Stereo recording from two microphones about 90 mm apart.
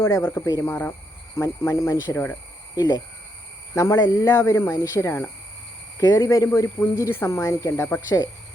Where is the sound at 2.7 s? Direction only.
50° left (ahead or behind).